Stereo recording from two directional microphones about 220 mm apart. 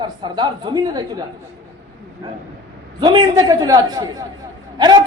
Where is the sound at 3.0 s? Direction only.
20° right (ahead or behind).